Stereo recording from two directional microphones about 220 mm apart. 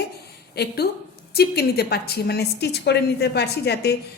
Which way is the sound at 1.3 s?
45° left (ahead or behind).